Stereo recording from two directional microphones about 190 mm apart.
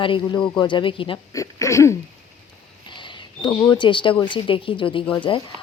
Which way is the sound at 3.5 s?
15° left (ahead or behind).